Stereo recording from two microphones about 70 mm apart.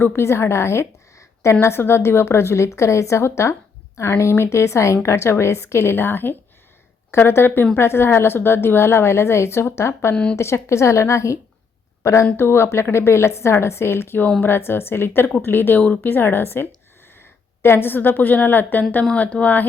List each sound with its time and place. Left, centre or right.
0.0 s a woman's voice: left